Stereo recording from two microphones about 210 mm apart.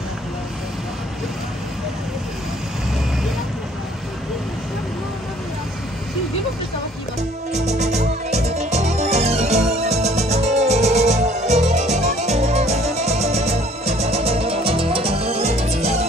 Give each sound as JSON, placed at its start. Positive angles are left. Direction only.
{"t": 7.5, "sound": "music", "side_deg": -30}